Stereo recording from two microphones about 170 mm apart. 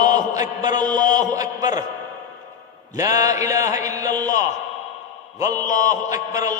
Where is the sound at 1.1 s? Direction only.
20° right (ahead or behind).